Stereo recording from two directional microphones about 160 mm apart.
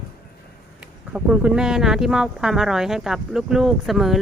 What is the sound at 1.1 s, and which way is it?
Speech, 5° right (ahead or behind).